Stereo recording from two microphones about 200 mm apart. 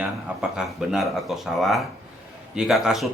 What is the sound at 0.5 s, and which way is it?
Speech, centre (ahead or behind).